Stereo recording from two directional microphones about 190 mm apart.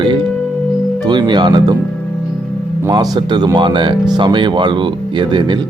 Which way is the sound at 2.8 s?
20° right (ahead or behind).